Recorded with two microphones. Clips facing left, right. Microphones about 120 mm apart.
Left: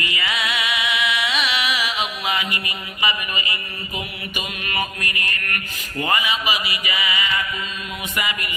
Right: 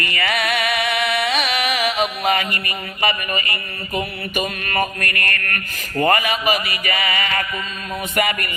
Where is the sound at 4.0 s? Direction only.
45° right (ahead or behind).